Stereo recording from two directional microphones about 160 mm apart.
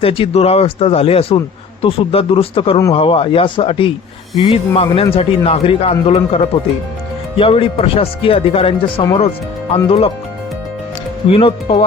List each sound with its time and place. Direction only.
0.0 s speech: 35° left (ahead or behind)
11.3 s speech: 35° left (ahead or behind)